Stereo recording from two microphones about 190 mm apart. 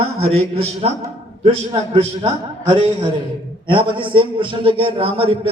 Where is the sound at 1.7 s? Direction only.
30° right (ahead or behind).